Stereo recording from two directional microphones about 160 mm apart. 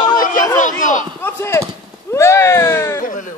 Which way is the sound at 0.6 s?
50° left (ahead or behind).